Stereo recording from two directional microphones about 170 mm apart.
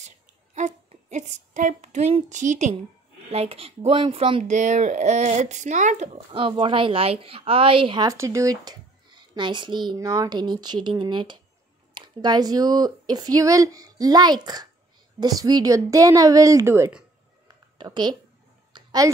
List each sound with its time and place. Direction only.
0.6 s speech: 45° right (ahead or behind)
6.3 s speech: 30° right (ahead or behind); by 17.0 s 15° right (ahead or behind)
17.7 s speech: 25° right (ahead or behind)
18.7 s a sound: 25° right (ahead or behind)